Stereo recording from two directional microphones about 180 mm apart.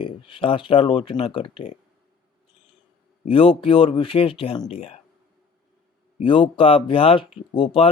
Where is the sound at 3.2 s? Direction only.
30° left (ahead or behind).